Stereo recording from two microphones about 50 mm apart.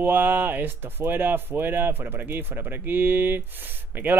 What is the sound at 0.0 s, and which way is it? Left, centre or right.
Speech, right.